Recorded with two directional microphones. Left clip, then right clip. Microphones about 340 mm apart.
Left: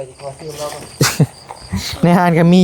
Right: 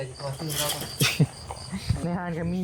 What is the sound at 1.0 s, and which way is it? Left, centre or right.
Insect, left.